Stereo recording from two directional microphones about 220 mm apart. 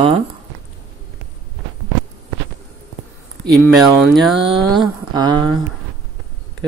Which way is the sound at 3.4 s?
Centre (ahead or behind).